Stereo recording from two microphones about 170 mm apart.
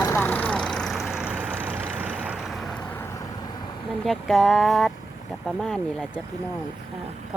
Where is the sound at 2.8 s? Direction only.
15° left (ahead or behind).